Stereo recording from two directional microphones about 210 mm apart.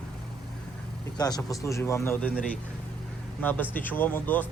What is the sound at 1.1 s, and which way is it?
Speech, 20° left (ahead or behind).